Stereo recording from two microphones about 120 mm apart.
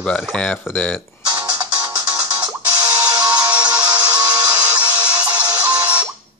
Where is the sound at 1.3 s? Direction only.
30° right (ahead or behind).